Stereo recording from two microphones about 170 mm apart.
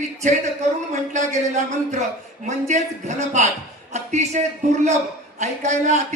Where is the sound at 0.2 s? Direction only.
40° right (ahead or behind).